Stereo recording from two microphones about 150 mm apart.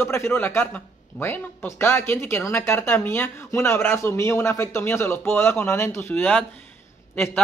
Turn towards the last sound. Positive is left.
turn(degrees=15)  # may be behind; listen again after turning